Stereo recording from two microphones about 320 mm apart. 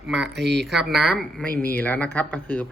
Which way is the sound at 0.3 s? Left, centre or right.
Right.